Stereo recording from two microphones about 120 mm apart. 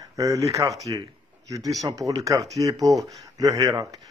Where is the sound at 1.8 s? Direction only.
30° right (ahead or behind).